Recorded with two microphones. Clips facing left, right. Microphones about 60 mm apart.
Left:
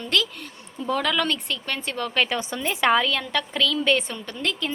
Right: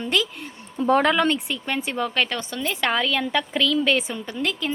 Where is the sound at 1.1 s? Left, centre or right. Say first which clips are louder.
Right 4 dB; right.